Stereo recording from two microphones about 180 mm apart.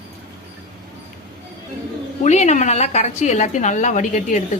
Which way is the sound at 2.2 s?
40° left (ahead or behind).